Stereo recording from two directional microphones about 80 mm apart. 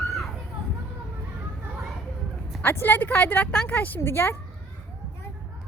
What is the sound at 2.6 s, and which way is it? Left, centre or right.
A woman's voice, left.